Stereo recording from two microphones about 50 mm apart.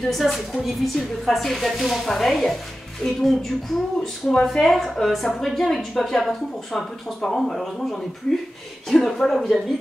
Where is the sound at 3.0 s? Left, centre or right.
Centre.